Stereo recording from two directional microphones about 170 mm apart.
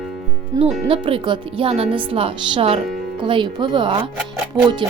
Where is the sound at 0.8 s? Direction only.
30° right (ahead or behind).